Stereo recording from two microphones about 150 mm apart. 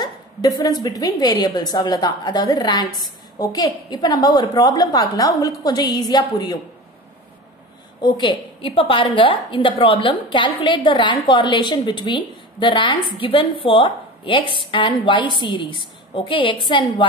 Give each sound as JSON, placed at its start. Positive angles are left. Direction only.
{"t": 0.0, "sound": "a woman's voice", "side_deg": 25}
{"t": 8.0, "sound": "a woman's voice", "side_deg": 30}